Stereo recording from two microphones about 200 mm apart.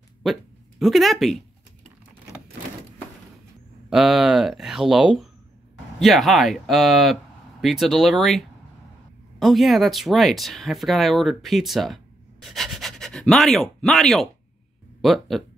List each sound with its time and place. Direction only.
0.2 s speech: centre (ahead or behind)
3.9 s speech: centre (ahead or behind)